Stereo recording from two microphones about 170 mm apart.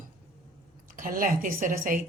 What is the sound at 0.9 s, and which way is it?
A woman's voice, 55° right (ahead or behind).